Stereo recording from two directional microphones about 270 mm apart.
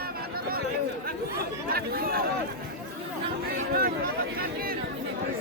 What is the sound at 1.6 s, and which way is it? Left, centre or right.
Chatter, right.